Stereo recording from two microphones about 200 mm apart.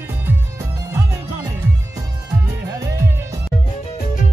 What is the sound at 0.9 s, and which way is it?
Music, 10° right (ahead or behind).